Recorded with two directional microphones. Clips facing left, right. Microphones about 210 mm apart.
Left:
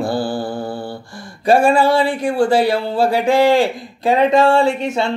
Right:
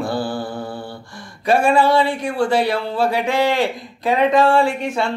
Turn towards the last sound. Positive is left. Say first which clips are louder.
# left 3 dB
turn(degrees=25)  # may be behind; listen again after turning